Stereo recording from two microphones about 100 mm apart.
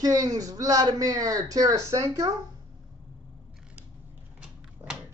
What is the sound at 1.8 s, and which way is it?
Speech, 25° right (ahead or behind).